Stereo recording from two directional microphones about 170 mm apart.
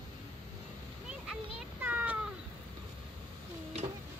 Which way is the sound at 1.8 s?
10° right (ahead or behind).